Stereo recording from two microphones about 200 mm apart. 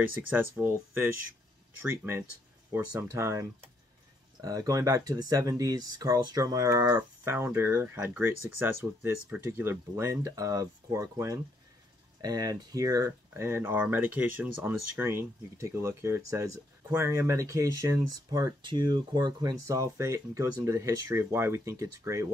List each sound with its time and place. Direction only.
0.3 s speech: 10° right (ahead or behind)